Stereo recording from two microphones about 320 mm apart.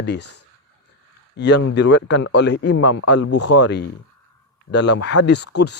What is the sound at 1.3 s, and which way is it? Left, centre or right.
Speech, left.